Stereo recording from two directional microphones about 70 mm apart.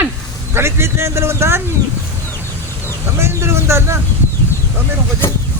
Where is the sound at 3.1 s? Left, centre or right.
Right.